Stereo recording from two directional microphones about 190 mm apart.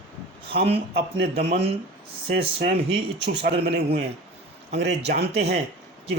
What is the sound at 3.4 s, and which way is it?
Speech, 60° right (ahead or behind).